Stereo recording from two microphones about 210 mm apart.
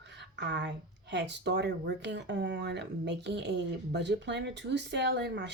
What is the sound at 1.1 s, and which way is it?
A woman's voice, 55° right (ahead or behind).